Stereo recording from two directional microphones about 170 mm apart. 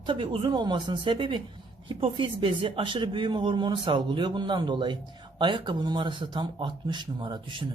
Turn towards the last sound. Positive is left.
turn(degrees=-25)  # may be behind; listen again after turning